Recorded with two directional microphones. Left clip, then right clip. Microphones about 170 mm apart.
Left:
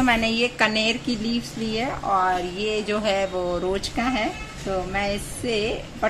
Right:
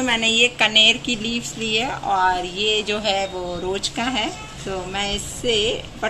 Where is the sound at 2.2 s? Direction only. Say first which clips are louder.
Right 4 dB; 40° left (ahead or behind).